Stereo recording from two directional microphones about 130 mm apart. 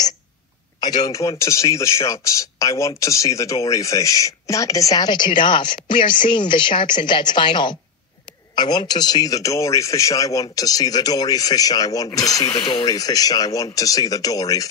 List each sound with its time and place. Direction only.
0.7 s speech: 30° left (ahead or behind)
12.4 s speech: 40° left (ahead or behind); by 14.7 s 25° left (ahead or behind)